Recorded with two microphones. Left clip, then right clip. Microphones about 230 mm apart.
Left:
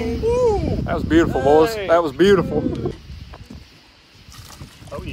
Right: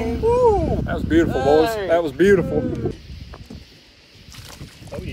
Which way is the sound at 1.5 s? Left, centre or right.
Left.